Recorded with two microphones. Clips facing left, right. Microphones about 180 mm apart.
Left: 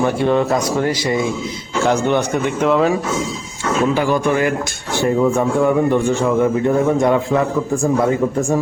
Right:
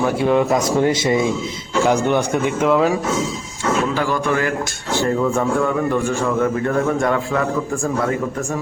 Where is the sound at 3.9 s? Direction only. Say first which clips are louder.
Left 3 dB; 15° left (ahead or behind).